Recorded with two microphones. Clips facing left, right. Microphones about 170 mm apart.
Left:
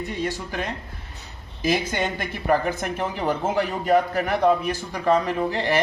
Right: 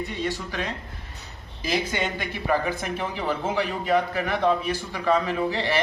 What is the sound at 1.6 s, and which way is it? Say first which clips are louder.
Speech: left 3 dB; 50° left (ahead or behind).